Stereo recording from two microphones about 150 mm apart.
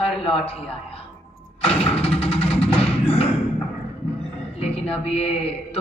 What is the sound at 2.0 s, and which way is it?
Music, 40° left (ahead or behind).